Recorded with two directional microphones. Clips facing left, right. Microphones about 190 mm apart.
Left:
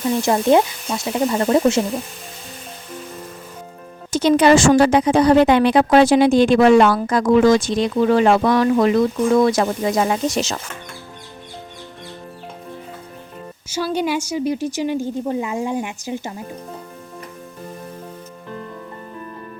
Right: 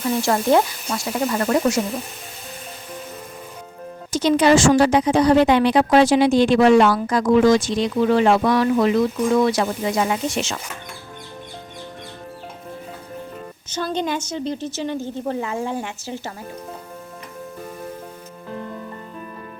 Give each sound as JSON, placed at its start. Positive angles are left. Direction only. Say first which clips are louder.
{"t": 0.2, "sound": "speech", "louder": "left 2 dB", "side_deg": 20}
{"t": 4.1, "sound": "a woman's voice", "louder": "left 2 dB", "side_deg": 55}
{"t": 13.7, "sound": "a woman's voice", "louder": "left 3 dB", "side_deg": 10}